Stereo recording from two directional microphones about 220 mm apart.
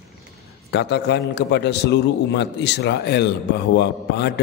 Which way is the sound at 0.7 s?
50° left (ahead or behind).